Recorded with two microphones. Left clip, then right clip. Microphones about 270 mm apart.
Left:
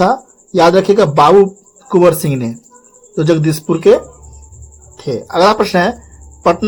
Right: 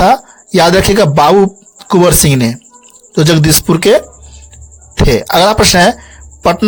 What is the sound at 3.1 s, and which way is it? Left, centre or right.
Speech, right.